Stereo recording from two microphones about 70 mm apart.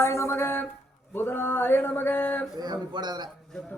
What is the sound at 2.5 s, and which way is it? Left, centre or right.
Speech, right.